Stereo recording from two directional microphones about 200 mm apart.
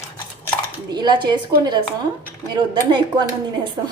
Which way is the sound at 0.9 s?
20° right (ahead or behind).